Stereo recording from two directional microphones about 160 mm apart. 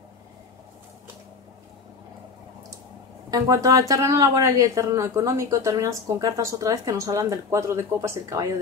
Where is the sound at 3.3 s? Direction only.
20° right (ahead or behind).